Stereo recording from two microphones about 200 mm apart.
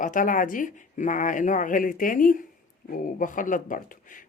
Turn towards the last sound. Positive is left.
turn(degrees=40)  # may be behind; listen again after turning